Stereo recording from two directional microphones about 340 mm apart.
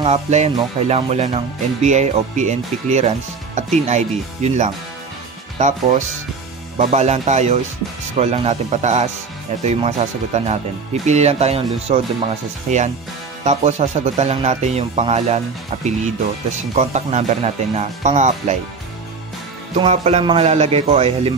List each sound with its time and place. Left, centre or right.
0.0 s speech: centre
19.7 s speech: centre